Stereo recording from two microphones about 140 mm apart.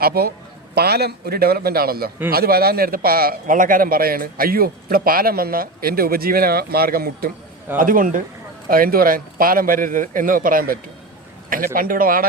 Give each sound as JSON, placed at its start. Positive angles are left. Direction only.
{"t": 0.0, "sound": "a man's voice", "side_deg": -90}
{"t": 8.7, "sound": "a man's voice", "side_deg": -90}